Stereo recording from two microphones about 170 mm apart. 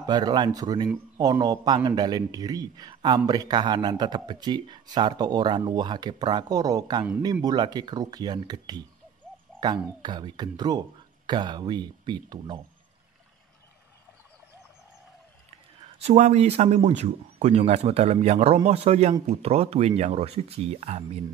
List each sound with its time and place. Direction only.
0.0 s speech: 25° right (ahead or behind)
16.0 s speech: 40° right (ahead or behind)